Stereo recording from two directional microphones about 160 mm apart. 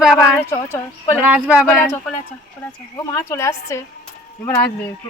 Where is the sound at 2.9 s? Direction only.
20° left (ahead or behind).